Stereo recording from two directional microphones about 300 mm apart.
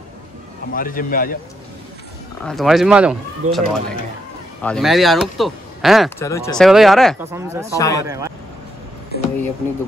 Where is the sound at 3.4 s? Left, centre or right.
Right.